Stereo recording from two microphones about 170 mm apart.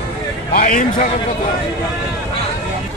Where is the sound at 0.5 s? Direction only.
55° left (ahead or behind).